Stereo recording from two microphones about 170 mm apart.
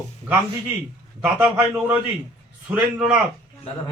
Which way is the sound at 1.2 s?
10° right (ahead or behind).